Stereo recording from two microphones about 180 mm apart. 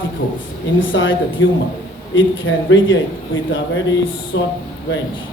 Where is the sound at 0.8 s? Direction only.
90° left.